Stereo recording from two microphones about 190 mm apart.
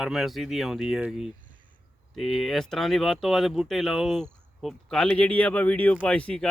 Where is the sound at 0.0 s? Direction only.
Centre (ahead or behind).